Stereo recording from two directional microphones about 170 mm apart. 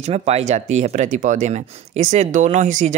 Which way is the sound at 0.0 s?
40° right (ahead or behind).